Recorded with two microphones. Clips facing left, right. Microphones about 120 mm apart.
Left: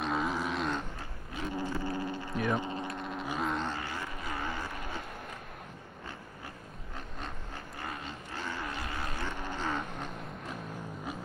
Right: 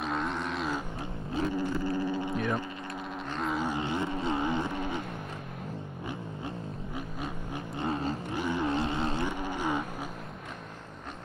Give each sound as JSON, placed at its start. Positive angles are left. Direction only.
{"t": 0.0, "sound": "vehicle", "side_deg": 0}
{"t": 2.3, "sound": "hum", "side_deg": 5}
{"t": 2.9, "sound": "vehicle", "side_deg": 0}
{"t": 3.7, "sound": "vehicle", "side_deg": -20}
{"t": 7.8, "sound": "roaring cats", "side_deg": -35}
{"t": 8.3, "sound": "a sound", "side_deg": -15}
{"t": 9.2, "sound": "livestock", "side_deg": -15}